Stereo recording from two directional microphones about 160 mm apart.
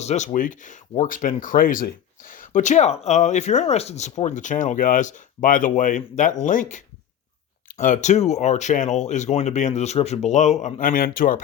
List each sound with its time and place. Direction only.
0.0 s speech: 45° left (ahead or behind)